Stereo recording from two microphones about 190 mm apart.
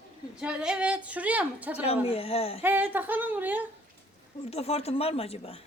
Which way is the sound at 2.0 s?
30° left (ahead or behind).